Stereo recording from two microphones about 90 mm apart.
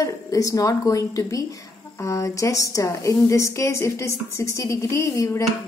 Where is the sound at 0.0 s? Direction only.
40° left (ahead or behind).